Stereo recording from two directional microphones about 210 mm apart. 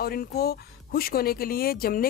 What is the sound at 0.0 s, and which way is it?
Speech, 45° left (ahead or behind).